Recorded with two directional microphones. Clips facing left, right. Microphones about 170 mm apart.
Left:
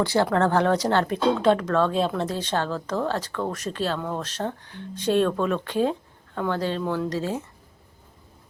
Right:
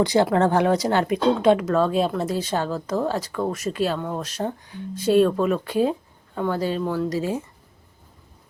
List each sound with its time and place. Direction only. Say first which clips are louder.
0.0 s speech: right 3 dB; 15° right (ahead or behind)